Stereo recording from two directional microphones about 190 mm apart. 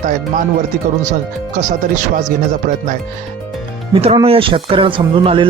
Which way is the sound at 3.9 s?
30° right (ahead or behind).